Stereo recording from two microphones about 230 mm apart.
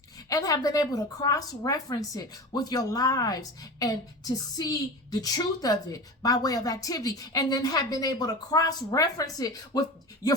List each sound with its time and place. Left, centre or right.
0.3 s a woman's voice: centre